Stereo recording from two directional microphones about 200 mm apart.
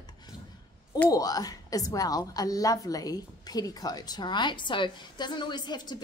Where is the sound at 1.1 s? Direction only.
20° left (ahead or behind).